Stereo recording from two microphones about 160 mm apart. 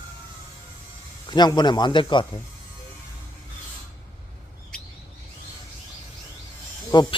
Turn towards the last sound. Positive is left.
turn(degrees=25)  # may be behind; listen again after turning